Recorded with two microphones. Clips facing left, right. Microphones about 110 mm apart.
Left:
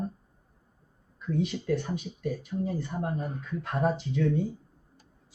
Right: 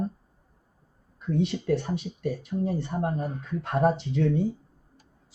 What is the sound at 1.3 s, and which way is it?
Speech, 65° right (ahead or behind).